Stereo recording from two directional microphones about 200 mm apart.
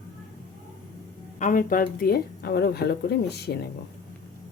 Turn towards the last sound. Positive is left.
turn(degrees=55)  # may be behind; listen again after turning